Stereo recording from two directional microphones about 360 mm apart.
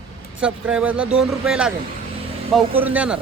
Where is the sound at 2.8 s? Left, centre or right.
Centre.